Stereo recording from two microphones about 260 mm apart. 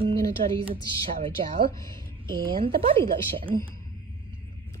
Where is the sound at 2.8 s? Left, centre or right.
Right.